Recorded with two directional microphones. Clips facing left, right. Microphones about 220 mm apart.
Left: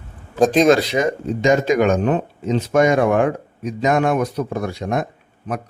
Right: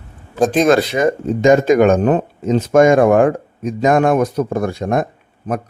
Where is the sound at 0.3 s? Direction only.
5° right (ahead or behind).